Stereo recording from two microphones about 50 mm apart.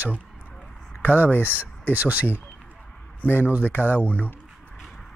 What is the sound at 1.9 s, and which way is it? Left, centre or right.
Speech, right.